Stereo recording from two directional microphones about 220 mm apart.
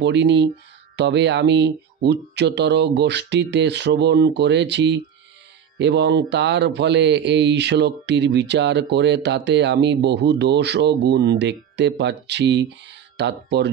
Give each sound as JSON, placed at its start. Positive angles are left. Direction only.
{"t": 0.0, "sound": "speech", "side_deg": -50}